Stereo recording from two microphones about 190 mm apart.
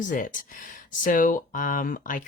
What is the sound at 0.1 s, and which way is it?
Speech, 45° left (ahead or behind).